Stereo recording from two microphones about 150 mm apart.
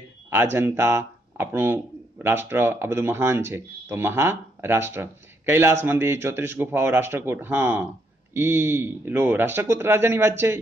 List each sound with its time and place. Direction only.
0.3 s speech: 15° right (ahead or behind)